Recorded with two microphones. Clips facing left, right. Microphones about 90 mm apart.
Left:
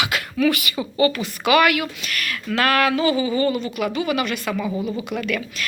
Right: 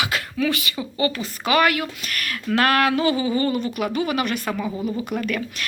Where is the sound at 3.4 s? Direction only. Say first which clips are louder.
Left 1 dB; 45° right (ahead or behind).